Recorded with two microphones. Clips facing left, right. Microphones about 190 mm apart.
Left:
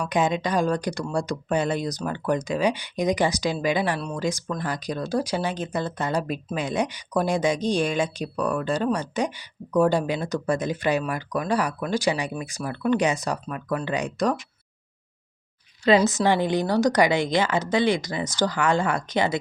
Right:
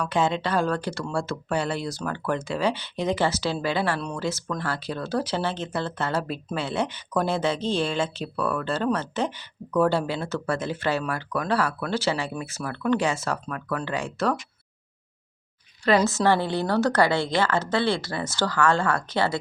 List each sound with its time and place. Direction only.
0.0 s speech: 15° left (ahead or behind)
15.8 s speech: 20° left (ahead or behind)